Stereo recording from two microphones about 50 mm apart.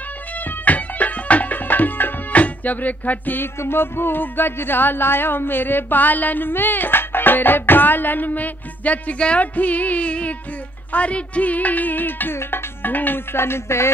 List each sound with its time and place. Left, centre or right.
0.7 s music: left
10.9 s a sound: left
12.4 s music: left